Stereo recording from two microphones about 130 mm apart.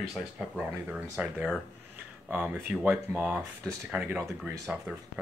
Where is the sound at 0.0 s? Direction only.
Centre (ahead or behind).